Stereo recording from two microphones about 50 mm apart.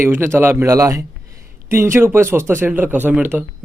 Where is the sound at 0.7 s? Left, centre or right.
Right.